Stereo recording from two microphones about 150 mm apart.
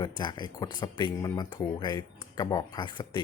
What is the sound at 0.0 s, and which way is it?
Speech, 30° left (ahead or behind).